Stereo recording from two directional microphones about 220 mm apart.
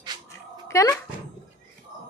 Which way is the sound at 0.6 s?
15° left (ahead or behind).